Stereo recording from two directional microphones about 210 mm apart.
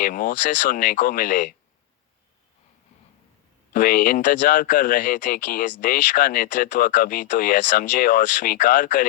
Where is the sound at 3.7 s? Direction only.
40° left (ahead or behind).